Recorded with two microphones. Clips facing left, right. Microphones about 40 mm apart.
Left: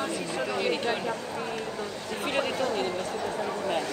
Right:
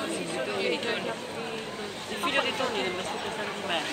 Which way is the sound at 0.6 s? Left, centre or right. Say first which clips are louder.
Left 2 dB; right.